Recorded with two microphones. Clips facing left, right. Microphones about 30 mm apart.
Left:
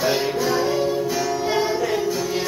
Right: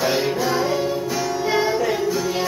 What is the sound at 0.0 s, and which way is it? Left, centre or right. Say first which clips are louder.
Music: right 1 dB; centre.